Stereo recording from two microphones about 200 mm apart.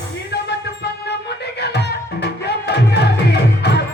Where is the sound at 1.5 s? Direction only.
55° left (ahead or behind).